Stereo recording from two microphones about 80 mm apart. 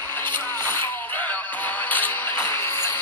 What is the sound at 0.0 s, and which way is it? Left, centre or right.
Music, left.